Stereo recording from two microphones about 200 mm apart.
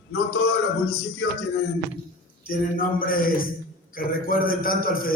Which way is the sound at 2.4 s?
45° left (ahead or behind).